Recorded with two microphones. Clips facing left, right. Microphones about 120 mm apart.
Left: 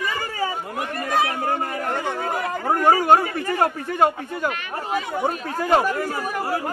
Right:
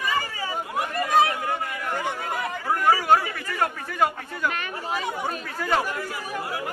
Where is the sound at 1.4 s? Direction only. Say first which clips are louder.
Left 4 dB; 40° left (ahead or behind).